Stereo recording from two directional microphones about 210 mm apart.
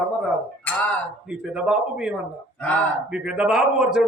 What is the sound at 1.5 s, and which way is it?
Speech, 5° right (ahead or behind).